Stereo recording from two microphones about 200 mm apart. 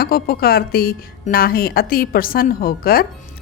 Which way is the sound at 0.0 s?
50° left (ahead or behind).